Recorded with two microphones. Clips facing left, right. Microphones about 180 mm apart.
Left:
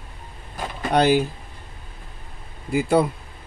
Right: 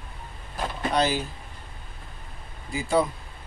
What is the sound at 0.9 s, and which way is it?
Speech, 60° left (ahead or behind).